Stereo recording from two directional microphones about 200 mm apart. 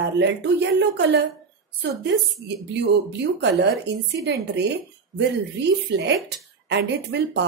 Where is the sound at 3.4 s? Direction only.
60° right (ahead or behind).